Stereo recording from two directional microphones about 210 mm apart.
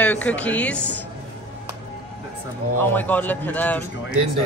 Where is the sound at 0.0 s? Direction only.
5° left (ahead or behind).